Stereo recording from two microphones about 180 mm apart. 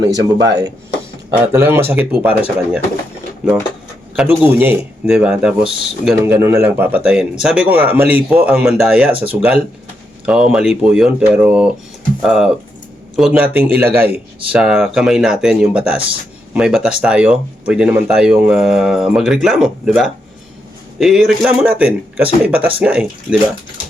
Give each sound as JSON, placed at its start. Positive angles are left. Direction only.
{"t": 0.1, "sound": "speech", "side_deg": -20}
{"t": 4.1, "sound": "speech", "side_deg": -5}